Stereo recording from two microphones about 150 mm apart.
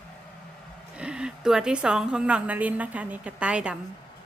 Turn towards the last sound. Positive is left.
turn(degrees=-5)  # may be behind; listen again after turning